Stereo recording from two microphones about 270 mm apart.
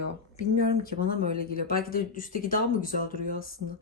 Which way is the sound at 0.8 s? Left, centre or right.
Left.